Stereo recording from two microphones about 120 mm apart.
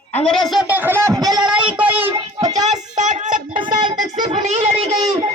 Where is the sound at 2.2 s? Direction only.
65° right (ahead or behind); by 3.4 s 90° right.